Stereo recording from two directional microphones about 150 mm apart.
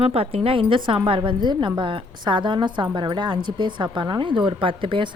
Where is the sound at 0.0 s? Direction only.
40° right (ahead or behind).